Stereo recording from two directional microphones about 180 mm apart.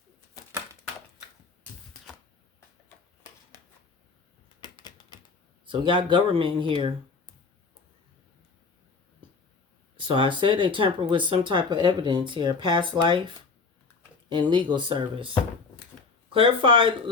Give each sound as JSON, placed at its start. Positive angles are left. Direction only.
{"t": 4.6, "sound": "typing", "side_deg": 25}
{"t": 5.6, "sound": "speech", "side_deg": -25}
{"t": 10.0, "sound": "speech", "side_deg": -25}
{"t": 16.3, "sound": "speech", "side_deg": -30}